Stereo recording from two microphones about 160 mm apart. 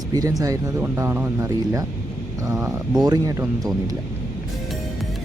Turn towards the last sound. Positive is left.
turn(degrees=-20)  # may be behind; listen again after turning